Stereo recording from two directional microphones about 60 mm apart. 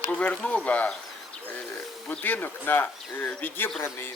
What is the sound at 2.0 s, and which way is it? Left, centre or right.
Speech, left.